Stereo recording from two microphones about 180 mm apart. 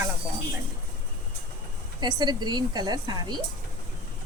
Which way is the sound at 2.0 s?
25° right (ahead or behind).